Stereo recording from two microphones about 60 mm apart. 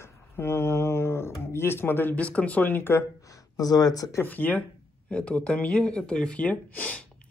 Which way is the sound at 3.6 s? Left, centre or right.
Left.